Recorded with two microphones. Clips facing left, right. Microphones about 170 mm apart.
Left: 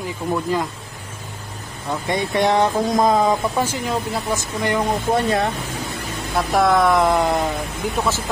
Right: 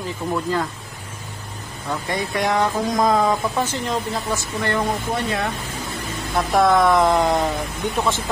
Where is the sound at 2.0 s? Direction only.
25° left (ahead or behind).